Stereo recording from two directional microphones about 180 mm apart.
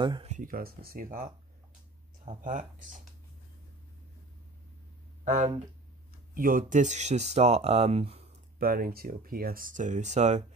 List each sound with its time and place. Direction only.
0.0 s speech: 25° right (ahead or behind)
0.3 s speech: 50° right (ahead or behind)
5.2 s speech: 40° right (ahead or behind)
8.5 s speech: 55° right (ahead or behind); by 10.4 s 40° right (ahead or behind)